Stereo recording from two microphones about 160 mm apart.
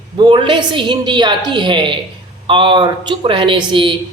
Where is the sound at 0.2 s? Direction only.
30° right (ahead or behind).